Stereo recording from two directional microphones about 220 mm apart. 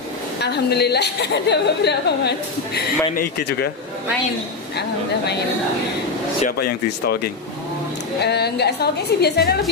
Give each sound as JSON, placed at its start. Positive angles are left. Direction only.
{"t": 0.4, "sound": "a woman's voice", "side_deg": 50}
{"t": 6.4, "sound": "a woman's voice", "side_deg": 45}
{"t": 8.2, "sound": "a woman's voice", "side_deg": 50}